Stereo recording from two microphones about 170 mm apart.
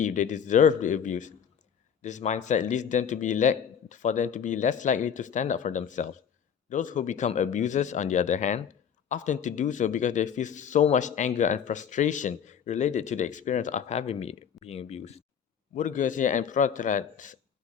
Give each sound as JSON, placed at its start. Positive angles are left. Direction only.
{"t": 0.0, "sound": "a man's voice", "side_deg": 45}
{"t": 15.7, "sound": "a man's voice", "side_deg": 50}